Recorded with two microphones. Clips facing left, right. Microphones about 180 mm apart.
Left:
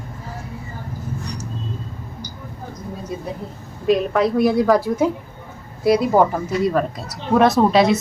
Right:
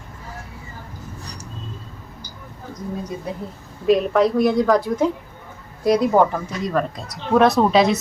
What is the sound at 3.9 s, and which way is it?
A woman's voice, centre (ahead or behind).